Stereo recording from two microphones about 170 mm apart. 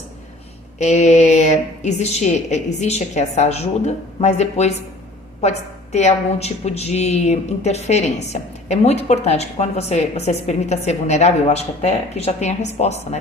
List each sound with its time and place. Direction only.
0.8 s a woman's voice: 40° left (ahead or behind)